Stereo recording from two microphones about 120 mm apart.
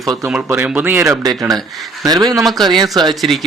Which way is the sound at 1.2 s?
30° right (ahead or behind).